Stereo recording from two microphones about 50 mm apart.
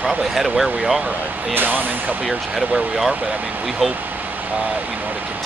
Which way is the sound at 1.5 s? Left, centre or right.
Right.